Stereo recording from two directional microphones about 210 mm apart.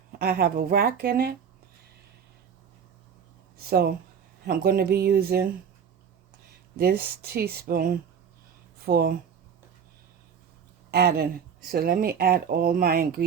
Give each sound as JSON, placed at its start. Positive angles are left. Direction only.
{"t": 0.2, "sound": "speech", "side_deg": -45}
{"t": 3.6, "sound": "speech", "side_deg": -45}
{"t": 6.7, "sound": "speech", "side_deg": -45}
{"t": 10.9, "sound": "speech", "side_deg": -50}